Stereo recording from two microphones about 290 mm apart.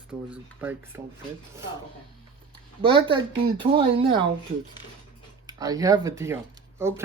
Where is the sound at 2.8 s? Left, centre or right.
Centre.